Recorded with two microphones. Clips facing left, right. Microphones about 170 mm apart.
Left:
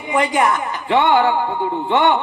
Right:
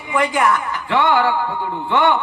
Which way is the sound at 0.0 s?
20° left (ahead or behind).